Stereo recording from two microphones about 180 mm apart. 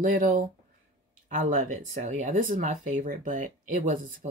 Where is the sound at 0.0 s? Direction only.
45° right (ahead or behind).